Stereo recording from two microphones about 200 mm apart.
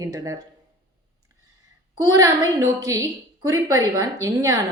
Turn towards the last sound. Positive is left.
turn(degrees=-15)  # may be behind; listen again after turning